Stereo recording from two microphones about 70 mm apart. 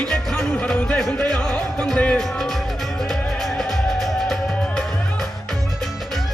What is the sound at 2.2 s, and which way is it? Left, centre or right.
Speech, centre.